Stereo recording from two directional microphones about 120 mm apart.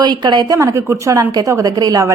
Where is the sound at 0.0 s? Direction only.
35° right (ahead or behind).